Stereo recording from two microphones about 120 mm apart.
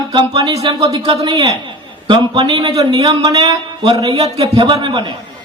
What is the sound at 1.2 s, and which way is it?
Speech, 30° right (ahead or behind).